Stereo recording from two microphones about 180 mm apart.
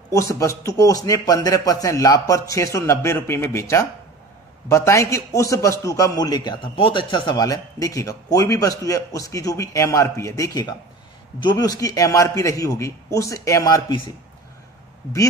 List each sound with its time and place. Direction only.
0.1 s a man's voice: 15° left (ahead or behind)